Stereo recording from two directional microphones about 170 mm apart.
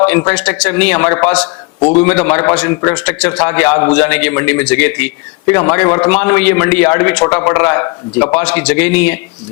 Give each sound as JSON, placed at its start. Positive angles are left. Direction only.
{"t": 0.0, "sound": "a man's voice", "side_deg": 10}
{"t": 1.4, "sound": "speech", "side_deg": 25}
{"t": 2.0, "sound": "a man's voice", "side_deg": 10}